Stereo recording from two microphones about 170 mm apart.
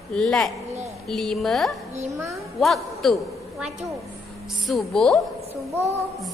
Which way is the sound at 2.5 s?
Centre (ahead or behind).